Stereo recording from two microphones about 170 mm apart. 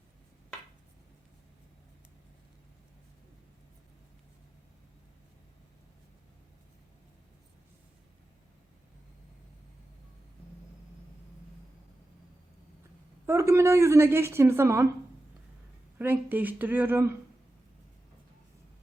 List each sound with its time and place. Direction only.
13.2 s a woman's voice: 15° right (ahead or behind)
16.0 s a woman's voice: 10° right (ahead or behind)